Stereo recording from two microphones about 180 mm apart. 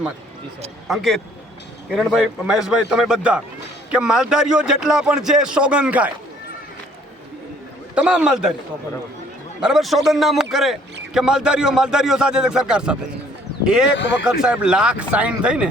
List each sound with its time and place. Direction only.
0.9 s speech: centre (ahead or behind)
7.9 s speech: 5° right (ahead or behind)
9.6 s speech: centre (ahead or behind)
13.9 s speech: 80° left
14.3 s speech: 5° right (ahead or behind)